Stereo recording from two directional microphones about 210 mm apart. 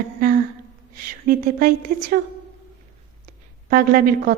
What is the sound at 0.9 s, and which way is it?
A woman's voice, 45° right (ahead or behind).